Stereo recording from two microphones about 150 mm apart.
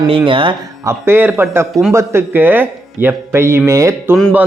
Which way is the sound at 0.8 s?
15° right (ahead or behind).